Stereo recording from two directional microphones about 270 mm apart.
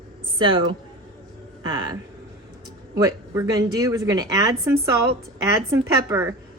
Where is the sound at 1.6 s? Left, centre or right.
Centre.